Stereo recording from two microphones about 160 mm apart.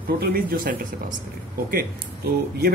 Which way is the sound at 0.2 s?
70° right (ahead or behind).